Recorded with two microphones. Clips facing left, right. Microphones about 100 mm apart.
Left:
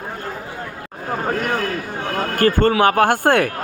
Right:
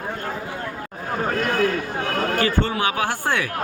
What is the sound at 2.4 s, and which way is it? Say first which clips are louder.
Speech: left 11 dB; 50° left (ahead or behind).